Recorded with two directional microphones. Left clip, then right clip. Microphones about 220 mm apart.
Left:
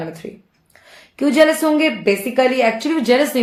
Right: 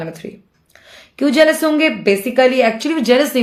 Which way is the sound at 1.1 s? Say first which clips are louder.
Right 1 dB; 35° right (ahead or behind).